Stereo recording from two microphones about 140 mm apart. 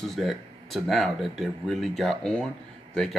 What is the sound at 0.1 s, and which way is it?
Speech, centre (ahead or behind).